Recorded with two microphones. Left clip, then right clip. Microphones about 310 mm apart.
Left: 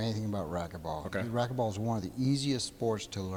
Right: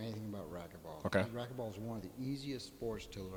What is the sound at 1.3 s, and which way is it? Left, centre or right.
Speech, left.